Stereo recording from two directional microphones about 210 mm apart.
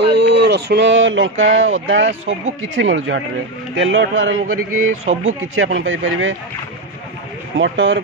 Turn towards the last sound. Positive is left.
turn(degrees=-60)  # may be behind; listen again after turning